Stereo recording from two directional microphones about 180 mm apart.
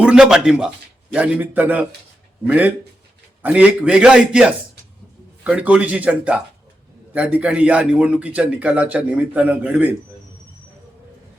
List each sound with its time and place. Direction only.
0.0 s a man's voice: 5° right (ahead or behind)